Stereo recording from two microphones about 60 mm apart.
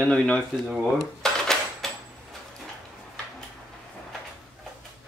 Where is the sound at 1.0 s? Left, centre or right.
Centre.